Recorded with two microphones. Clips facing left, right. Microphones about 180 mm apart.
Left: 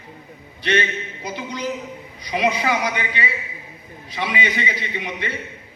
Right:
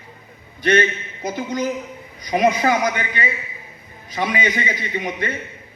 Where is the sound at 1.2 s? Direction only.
45° right (ahead or behind).